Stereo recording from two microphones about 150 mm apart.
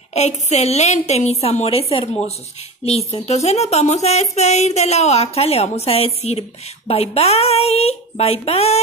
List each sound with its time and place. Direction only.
0.1 s speech: 45° left (ahead or behind)